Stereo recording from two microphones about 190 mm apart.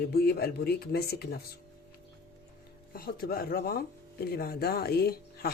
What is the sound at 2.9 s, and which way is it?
Speech, 50° left (ahead or behind).